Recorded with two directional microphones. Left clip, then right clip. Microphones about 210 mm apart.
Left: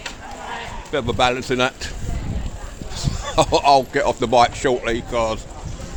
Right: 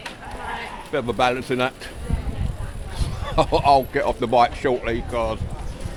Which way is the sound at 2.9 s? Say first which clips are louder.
Left 3 dB; 20° left (ahead or behind).